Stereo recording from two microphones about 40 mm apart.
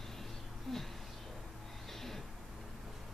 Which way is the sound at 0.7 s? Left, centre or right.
Centre.